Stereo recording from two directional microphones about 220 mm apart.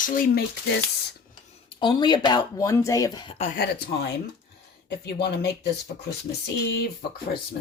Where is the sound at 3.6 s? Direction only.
50° left (ahead or behind).